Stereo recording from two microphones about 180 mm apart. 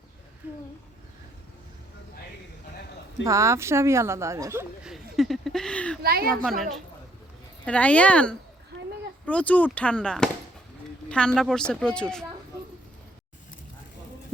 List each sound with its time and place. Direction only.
3.2 s speech: 15° right (ahead or behind)
4.8 s a sound: centre (ahead or behind)
6.0 s a woman's voice: 55° right (ahead or behind)
6.3 s speech: centre (ahead or behind)